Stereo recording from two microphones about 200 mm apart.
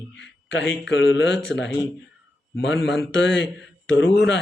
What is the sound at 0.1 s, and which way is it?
A man's voice, 60° left (ahead or behind).